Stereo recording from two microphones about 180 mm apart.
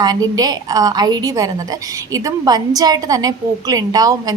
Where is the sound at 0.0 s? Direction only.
20° right (ahead or behind).